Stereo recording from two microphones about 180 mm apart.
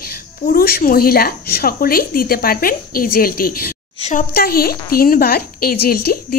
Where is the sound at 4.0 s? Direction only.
40° left (ahead or behind).